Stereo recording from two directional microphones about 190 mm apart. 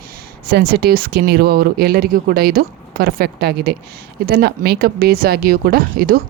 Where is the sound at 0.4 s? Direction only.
55° right (ahead or behind).